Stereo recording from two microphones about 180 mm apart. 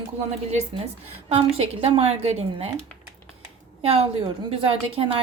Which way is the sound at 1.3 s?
35° right (ahead or behind).